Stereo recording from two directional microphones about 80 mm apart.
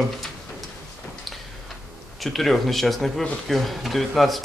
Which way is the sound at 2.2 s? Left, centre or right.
Centre.